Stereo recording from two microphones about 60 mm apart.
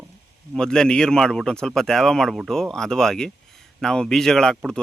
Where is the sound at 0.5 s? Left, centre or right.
Centre.